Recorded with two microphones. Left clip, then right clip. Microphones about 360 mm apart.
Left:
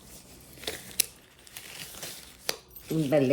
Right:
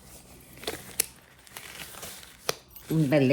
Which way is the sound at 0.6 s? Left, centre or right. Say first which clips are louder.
Left 1 dB; centre.